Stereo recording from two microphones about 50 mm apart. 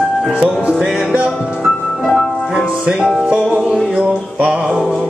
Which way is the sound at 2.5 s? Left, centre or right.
Centre.